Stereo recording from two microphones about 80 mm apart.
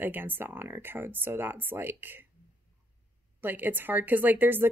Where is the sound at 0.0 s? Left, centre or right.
Right.